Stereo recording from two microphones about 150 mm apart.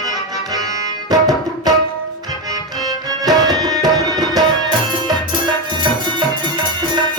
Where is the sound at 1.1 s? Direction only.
25° right (ahead or behind).